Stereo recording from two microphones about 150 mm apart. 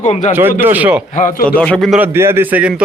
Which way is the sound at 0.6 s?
10° right (ahead or behind).